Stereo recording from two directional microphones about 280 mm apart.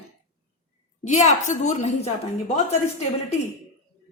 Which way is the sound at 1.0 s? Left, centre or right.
Left.